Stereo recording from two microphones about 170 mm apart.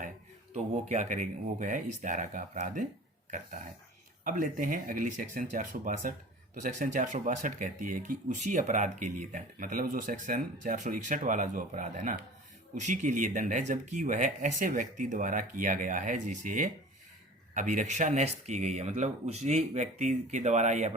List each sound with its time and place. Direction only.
0.5 s speech: 45° right (ahead or behind)
4.2 s speech: 55° right (ahead or behind)